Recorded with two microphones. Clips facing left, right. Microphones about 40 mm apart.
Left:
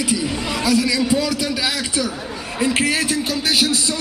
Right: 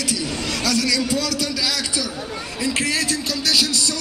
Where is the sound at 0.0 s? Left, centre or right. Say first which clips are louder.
Left 3 dB; left.